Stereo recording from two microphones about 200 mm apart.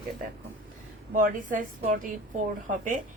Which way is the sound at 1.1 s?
40° right (ahead or behind).